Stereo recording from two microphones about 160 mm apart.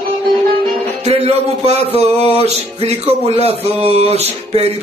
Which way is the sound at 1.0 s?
40° right (ahead or behind).